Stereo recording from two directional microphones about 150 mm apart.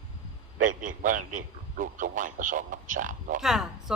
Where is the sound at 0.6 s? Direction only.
60° right (ahead or behind).